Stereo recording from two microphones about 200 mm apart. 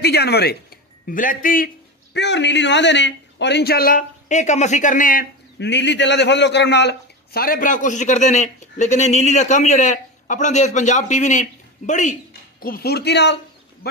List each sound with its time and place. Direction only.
0.0 s speech: 55° left (ahead or behind)
1.0 s speech: 40° left (ahead or behind)
2.1 s a man's voice: 60° left (ahead or behind); by 5.2 s 40° left (ahead or behind)
5.6 s a man's voice: 60° left (ahead or behind)